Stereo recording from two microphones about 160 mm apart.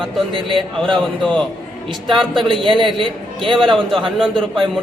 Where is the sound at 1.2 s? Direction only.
5° left (ahead or behind).